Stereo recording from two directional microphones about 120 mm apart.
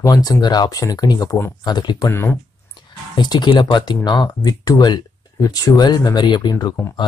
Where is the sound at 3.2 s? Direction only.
35° left (ahead or behind).